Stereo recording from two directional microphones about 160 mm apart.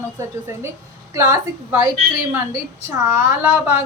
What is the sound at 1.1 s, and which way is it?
Speech, 20° right (ahead or behind).